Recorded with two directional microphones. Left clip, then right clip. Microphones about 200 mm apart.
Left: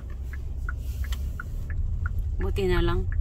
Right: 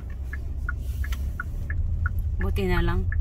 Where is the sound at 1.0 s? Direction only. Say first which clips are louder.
Right 4 dB; 25° left (ahead or behind).